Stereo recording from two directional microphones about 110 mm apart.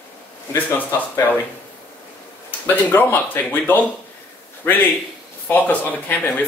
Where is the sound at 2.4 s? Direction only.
20° left (ahead or behind).